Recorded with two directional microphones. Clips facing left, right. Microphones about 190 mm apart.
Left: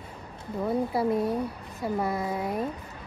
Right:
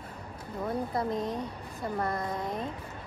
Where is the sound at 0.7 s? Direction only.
5° left (ahead or behind).